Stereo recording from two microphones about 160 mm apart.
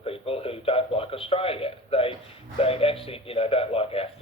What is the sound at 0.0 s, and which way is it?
A man's voice, 35° left (ahead or behind).